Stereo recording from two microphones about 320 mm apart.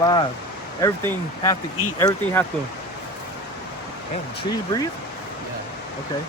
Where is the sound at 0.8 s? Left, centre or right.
Centre.